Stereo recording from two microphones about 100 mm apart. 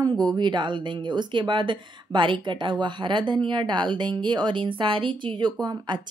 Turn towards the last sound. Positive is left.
turn(degrees=-45)  # may be behind; listen again after turning